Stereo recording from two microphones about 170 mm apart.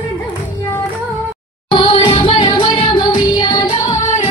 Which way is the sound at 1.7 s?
30° left (ahead or behind).